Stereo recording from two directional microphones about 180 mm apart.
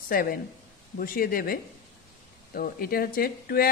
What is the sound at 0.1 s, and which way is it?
Speech, 55° left (ahead or behind).